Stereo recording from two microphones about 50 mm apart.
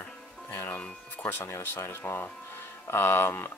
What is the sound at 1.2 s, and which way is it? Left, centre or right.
Speech, left.